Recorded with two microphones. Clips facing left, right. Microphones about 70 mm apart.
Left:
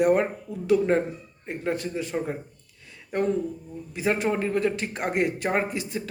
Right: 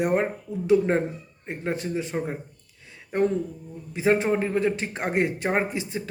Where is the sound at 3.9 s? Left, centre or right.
Right.